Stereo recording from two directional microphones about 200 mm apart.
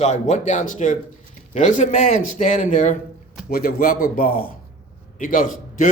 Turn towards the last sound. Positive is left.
turn(degrees=40)  # may be behind; listen again after turning